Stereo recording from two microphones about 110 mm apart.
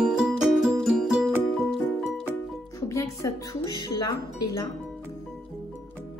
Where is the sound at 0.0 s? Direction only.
5° right (ahead or behind).